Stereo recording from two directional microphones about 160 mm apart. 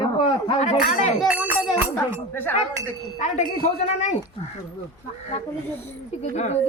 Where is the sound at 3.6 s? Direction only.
45° left (ahead or behind).